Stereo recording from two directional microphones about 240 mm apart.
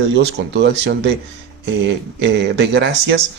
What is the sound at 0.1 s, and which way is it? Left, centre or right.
Speech, right.